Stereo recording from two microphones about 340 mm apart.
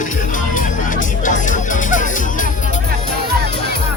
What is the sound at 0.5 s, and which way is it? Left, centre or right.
Music, left.